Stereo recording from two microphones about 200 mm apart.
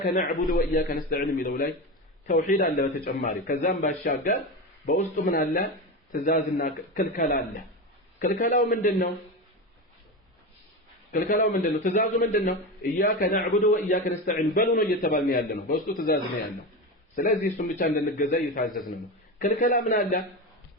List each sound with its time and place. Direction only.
0.0 s a man's voice: 45° left (ahead or behind)
11.1 s a man's voice: 40° left (ahead or behind)
17.2 s a man's voice: 40° left (ahead or behind)